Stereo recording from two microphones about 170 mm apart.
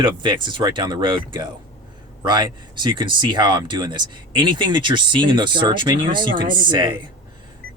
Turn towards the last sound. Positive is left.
turn(degrees=-25)  # may be behind; listen again after turning